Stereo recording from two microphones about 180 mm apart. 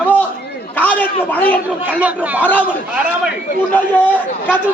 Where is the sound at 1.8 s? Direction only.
10° right (ahead or behind).